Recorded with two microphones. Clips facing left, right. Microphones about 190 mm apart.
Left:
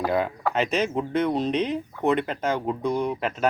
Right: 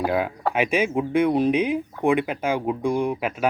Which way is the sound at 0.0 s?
5° right (ahead or behind).